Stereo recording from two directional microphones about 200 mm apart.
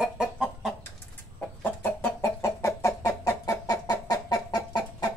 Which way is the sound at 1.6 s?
10° left (ahead or behind).